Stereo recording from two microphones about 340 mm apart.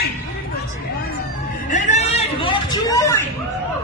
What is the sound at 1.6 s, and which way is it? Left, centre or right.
Speech, left.